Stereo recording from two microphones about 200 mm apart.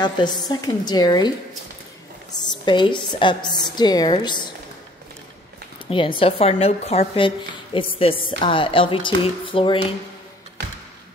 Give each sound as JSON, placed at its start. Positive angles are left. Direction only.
{"t": 0.0, "sound": "a woman's voice", "side_deg": 20}
{"t": 2.3, "sound": "a woman's voice", "side_deg": 20}
{"t": 5.9, "sound": "a woman's voice", "side_deg": 25}